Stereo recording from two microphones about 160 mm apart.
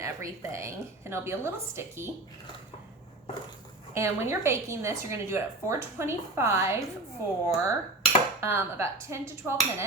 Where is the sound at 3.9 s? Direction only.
15° right (ahead or behind).